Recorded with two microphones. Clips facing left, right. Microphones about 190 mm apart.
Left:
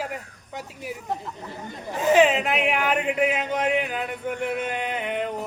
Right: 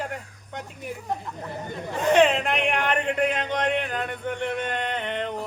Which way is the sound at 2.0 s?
5° left (ahead or behind).